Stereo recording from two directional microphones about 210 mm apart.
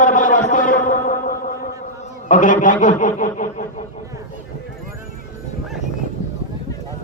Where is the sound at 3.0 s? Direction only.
40° left (ahead or behind).